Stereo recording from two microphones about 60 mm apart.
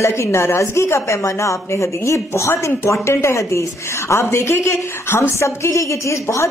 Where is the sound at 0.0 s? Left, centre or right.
Left.